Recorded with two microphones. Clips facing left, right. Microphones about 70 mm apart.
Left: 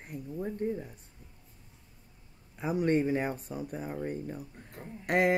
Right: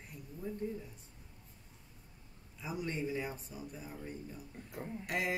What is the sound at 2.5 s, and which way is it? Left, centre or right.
Speech, left.